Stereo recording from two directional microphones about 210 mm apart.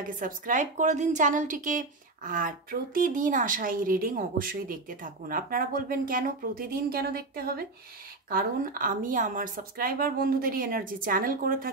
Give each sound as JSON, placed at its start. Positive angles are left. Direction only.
{"t": 0.2, "sound": "a woman's voice", "side_deg": -35}